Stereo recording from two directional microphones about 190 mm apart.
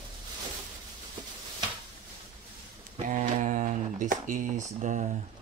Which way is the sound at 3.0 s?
45° right (ahead or behind).